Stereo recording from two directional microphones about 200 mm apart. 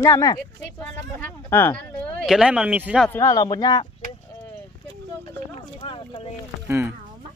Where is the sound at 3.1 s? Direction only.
15° left (ahead or behind).